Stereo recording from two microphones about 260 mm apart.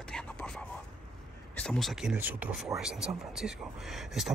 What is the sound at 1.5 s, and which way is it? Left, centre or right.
Speech, centre.